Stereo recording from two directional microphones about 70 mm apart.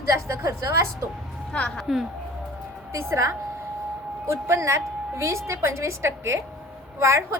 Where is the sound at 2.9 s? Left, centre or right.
Right.